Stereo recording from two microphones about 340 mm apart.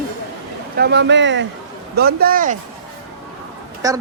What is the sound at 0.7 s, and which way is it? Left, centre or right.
A man's voice, right.